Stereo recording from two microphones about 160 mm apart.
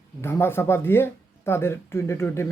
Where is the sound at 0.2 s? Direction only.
15° left (ahead or behind).